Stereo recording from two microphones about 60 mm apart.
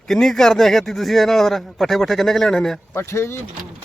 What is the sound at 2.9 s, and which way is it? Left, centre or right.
Speech, left.